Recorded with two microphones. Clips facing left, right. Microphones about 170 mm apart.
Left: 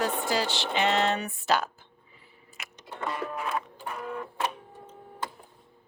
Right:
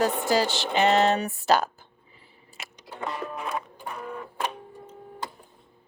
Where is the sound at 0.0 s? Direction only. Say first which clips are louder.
Right 5 dB; 40° right (ahead or behind).